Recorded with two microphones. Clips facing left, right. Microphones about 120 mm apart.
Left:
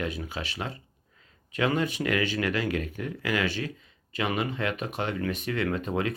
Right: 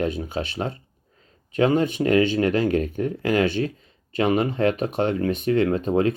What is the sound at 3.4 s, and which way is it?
Speech, 30° right (ahead or behind).